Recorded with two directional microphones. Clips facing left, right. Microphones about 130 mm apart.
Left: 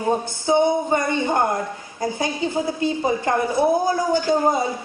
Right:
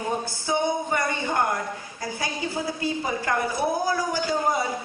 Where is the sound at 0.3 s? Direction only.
25° left (ahead or behind).